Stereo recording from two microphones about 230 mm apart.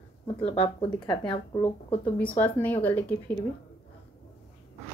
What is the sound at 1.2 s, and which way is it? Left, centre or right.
Speech, left.